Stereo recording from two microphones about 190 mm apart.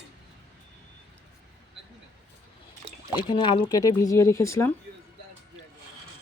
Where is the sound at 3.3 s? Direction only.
25° left (ahead or behind).